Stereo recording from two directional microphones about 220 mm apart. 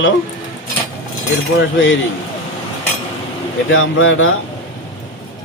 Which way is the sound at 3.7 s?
65° left (ahead or behind).